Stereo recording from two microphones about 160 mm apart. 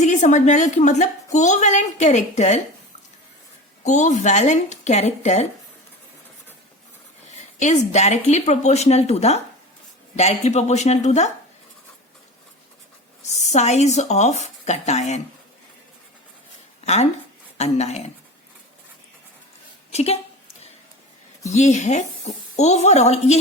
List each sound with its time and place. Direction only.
0.0 s a woman's voice: 50° left (ahead or behind)
3.8 s a woman's voice: 50° left (ahead or behind)
7.6 s a woman's voice: 45° left (ahead or behind)
13.2 s a woman's voice: 45° left (ahead or behind)
16.8 s a woman's voice: 45° left (ahead or behind)
19.9 s speech: 40° left (ahead or behind)
21.4 s a woman's voice: 45° left (ahead or behind)